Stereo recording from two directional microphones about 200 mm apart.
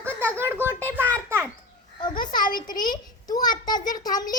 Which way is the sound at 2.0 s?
20° left (ahead or behind).